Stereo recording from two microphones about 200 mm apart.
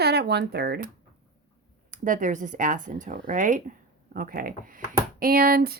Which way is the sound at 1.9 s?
40° right (ahead or behind).